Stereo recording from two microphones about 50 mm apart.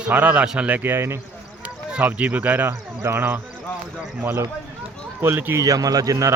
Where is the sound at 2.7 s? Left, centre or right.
Right.